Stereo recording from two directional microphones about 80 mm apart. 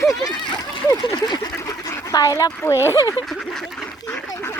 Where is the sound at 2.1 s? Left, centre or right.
Left.